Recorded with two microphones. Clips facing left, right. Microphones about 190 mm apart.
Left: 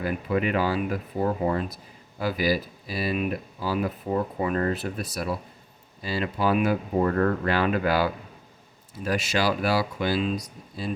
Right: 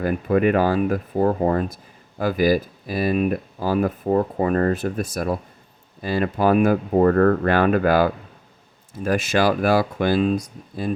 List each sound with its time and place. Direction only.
0.0 s speech: 45° right (ahead or behind)